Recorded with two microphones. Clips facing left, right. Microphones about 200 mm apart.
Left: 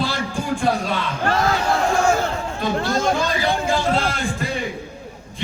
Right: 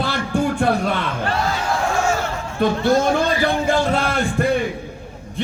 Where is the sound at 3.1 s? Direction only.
60° right (ahead or behind).